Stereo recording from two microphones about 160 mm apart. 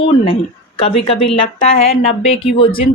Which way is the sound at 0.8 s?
35° left (ahead or behind).